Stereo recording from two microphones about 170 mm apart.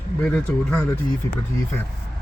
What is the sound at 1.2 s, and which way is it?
Speech, 20° left (ahead or behind).